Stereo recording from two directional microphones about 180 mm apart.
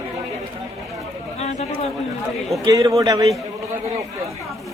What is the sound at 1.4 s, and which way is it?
Speech, 40° left (ahead or behind).